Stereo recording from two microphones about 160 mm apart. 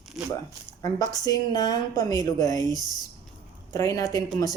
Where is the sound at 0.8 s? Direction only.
25° left (ahead or behind).